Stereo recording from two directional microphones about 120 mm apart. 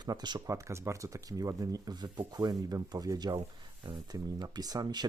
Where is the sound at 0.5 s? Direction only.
25° right (ahead or behind).